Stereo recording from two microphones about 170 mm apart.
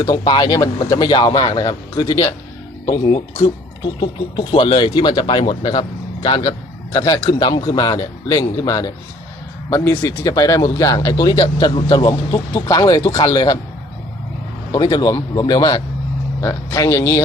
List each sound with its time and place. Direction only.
0.0 s speech: 25° left (ahead or behind)
14.7 s speech: 25° left (ahead or behind)